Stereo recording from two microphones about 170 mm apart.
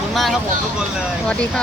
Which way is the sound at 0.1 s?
Centre (ahead or behind).